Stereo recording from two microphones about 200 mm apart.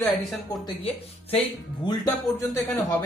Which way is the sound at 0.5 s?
20° left (ahead or behind).